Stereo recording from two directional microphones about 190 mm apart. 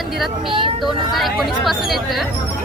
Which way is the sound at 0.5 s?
25° right (ahead or behind).